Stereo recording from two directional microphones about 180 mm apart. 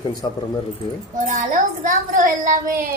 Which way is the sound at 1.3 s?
45° right (ahead or behind).